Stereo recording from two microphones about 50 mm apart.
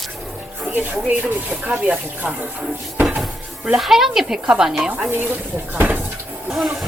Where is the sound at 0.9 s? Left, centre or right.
Right.